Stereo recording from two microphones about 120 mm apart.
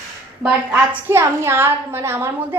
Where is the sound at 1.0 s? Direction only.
20° right (ahead or behind).